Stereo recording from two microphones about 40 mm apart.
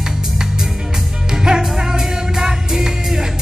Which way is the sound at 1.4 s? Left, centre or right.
Centre.